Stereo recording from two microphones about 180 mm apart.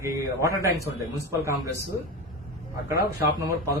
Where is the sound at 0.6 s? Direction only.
15° left (ahead or behind).